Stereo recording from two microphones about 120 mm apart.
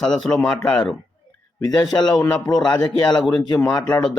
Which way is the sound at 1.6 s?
35° left (ahead or behind).